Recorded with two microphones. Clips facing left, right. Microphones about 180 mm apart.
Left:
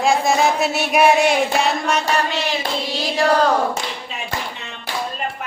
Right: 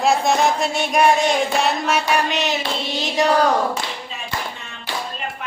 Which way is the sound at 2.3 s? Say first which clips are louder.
Right 1 dB; 20° right (ahead or behind).